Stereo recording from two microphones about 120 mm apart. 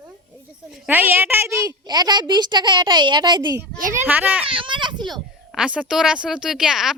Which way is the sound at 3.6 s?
15° right (ahead or behind).